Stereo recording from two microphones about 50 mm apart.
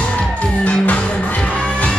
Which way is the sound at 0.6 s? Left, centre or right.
Left.